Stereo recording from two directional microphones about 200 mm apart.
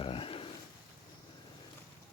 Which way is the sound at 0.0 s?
25° left (ahead or behind).